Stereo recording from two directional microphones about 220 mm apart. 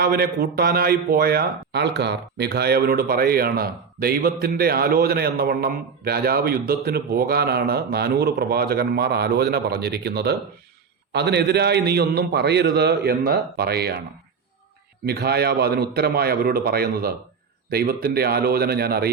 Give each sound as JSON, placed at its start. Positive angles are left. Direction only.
{"t": 0.0, "sound": "a man's voice", "side_deg": -45}
{"t": 15.0, "sound": "a man's voice", "side_deg": -45}